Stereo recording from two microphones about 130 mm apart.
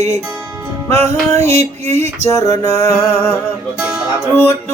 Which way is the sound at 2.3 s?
25° left (ahead or behind).